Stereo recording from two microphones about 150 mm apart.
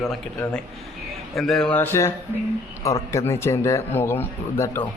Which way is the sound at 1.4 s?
Centre (ahead or behind).